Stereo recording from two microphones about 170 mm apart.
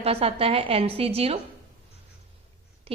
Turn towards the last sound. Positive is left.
turn(degrees=-35)  # may be behind; listen again after turning